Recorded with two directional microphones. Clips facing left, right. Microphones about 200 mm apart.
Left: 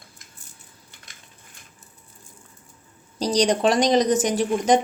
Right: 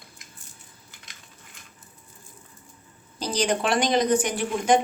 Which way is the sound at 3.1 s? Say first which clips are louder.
Left 5 dB; 40° left (ahead or behind).